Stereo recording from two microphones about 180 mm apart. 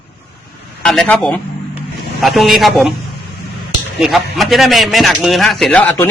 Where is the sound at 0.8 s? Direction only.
5° left (ahead or behind).